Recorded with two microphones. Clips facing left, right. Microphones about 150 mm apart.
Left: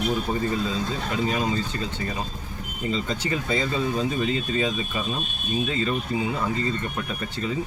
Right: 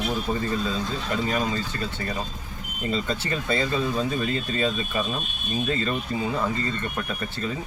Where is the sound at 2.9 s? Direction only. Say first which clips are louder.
Even; 20° left (ahead or behind).